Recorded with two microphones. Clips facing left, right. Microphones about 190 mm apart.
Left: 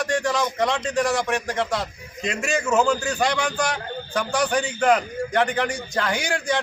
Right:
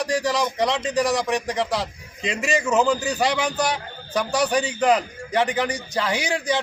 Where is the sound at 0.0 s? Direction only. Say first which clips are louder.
Even; centre (ahead or behind).